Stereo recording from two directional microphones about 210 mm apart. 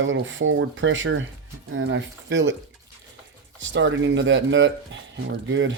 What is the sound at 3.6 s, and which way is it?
Speech, 60° right (ahead or behind).